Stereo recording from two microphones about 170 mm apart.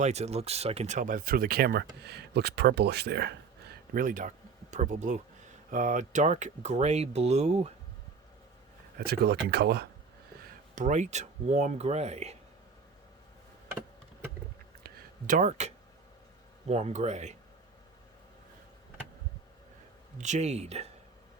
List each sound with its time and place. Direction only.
0.0 s speech: 40° right (ahead or behind); by 3.3 s 80° right
3.9 s speech: 50° right (ahead or behind)
9.0 s speech: 70° right (ahead or behind)
10.8 s speech: 45° right (ahead or behind)
14.8 s a sound: 50° right (ahead or behind)
16.6 s speech: 40° right (ahead or behind)
20.1 s speech: 45° right (ahead or behind)